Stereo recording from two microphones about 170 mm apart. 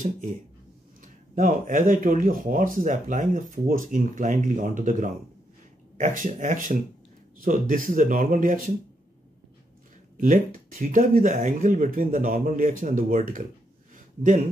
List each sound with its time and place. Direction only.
1.0 s speech: 50° right (ahead or behind)
10.2 s speech: 50° right (ahead or behind)